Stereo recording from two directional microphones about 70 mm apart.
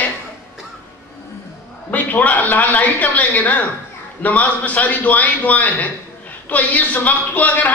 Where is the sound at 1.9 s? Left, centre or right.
Left.